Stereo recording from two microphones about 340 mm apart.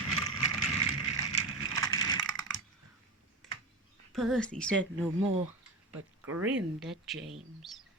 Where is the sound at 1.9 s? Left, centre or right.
Centre.